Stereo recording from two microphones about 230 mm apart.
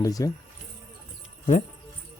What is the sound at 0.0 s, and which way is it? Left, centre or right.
Speech, centre.